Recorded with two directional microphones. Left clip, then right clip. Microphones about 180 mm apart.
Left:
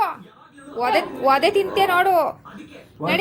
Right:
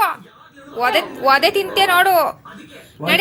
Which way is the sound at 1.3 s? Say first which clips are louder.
Right 3 dB; 20° left (ahead or behind).